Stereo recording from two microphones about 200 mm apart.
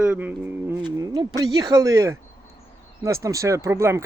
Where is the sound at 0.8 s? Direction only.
20° right (ahead or behind).